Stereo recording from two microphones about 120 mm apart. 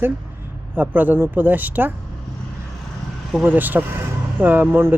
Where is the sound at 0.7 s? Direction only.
15° right (ahead or behind).